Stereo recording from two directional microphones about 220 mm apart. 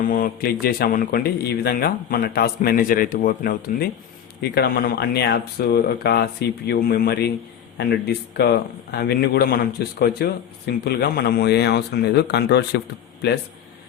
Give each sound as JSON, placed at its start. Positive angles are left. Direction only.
{"t": 0.0, "sound": "speech", "side_deg": 40}